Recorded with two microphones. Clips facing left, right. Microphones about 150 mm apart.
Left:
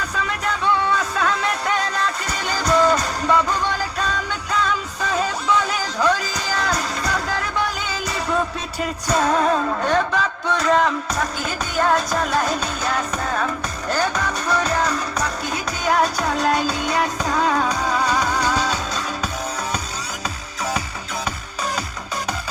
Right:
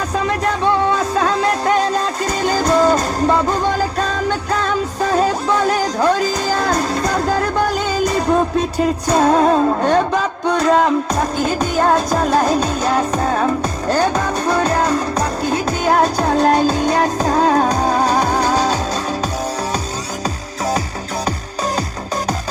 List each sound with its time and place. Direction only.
0.1 s music: 40° right (ahead or behind)